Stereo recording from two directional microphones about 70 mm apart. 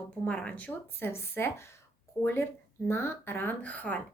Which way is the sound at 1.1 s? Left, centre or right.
Left.